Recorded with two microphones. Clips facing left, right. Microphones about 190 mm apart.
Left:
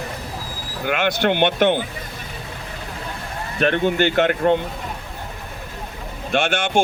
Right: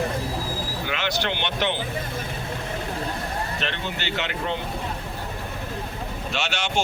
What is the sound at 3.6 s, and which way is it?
Speech, 50° left (ahead or behind).